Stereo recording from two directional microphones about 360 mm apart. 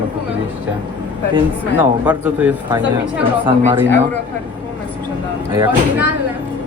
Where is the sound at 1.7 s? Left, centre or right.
Centre.